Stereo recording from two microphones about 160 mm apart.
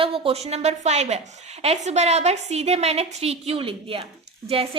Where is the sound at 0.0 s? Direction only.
35° right (ahead or behind).